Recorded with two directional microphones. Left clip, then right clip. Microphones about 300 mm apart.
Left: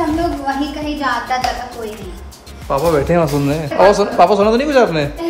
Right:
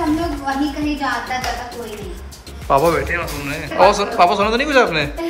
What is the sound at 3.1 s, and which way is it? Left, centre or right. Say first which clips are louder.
Speech: left 8 dB; centre.